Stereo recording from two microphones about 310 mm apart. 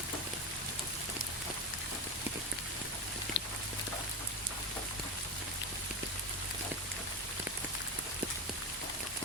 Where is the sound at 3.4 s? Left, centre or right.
Left.